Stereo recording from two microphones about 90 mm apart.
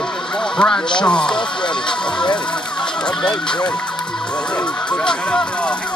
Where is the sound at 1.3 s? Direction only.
60° left (ahead or behind).